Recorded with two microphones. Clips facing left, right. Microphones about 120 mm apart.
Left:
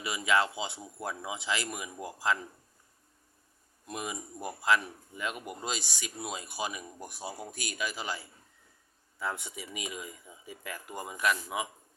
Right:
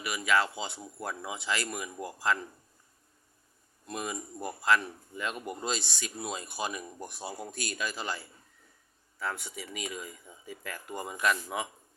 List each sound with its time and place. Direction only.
0.0 s speech: 20° left (ahead or behind)
3.8 s speech: 15° left (ahead or behind)